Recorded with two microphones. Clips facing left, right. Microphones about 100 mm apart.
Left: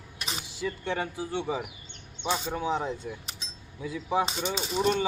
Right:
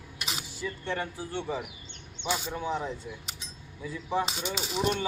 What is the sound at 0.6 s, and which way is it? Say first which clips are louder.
Speech: left 3 dB; 15° left (ahead or behind).